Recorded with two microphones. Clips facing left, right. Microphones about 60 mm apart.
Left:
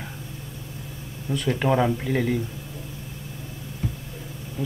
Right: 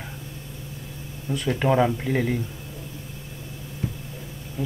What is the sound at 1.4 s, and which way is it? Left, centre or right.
Speech, centre.